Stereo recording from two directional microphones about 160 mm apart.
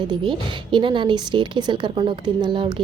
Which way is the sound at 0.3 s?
30° right (ahead or behind).